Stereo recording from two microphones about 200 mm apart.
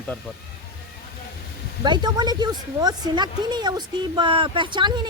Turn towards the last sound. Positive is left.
turn(degrees=-25)  # may be behind; listen again after turning